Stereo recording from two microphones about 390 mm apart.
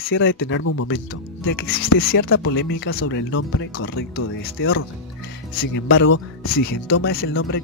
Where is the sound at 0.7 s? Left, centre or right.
Left.